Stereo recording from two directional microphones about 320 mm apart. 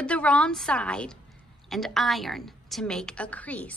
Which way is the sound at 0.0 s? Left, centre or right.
Centre.